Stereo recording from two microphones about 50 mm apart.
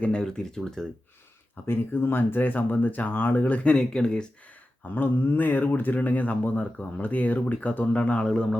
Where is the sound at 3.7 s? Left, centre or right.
Centre.